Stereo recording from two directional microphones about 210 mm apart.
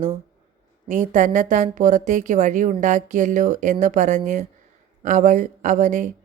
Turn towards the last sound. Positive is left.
turn(degrees=-35)  # may be behind; listen again after turning